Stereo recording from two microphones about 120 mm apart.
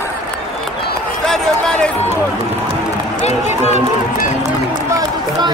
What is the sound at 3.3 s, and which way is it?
Speech, 65° left (ahead or behind).